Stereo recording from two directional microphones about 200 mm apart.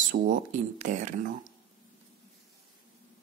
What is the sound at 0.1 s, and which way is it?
Speech, 45° right (ahead or behind).